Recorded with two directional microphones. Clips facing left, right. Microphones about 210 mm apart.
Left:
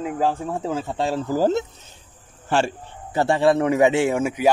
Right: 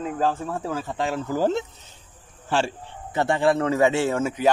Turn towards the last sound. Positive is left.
turn(degrees=10)  # may be behind; listen again after turning